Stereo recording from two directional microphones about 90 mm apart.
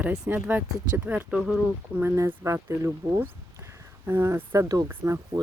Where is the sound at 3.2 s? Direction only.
30° right (ahead or behind).